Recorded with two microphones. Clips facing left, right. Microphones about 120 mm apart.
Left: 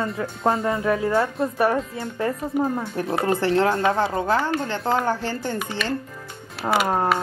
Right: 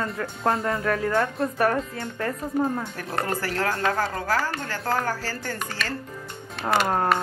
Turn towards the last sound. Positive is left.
turn(degrees=5)  # may be behind; listen again after turning